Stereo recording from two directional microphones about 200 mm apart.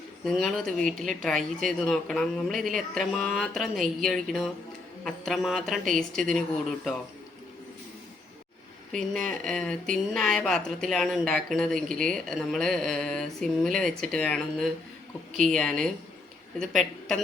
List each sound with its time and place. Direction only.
0.3 s a woman's voice: centre (ahead or behind)
8.9 s a woman's voice: centre (ahead or behind)